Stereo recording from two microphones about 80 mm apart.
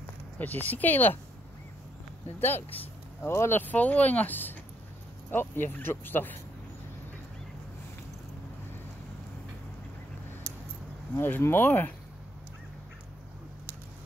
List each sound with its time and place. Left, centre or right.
0.4 s speech: left
3.2 s speech: left
11.1 s speech: left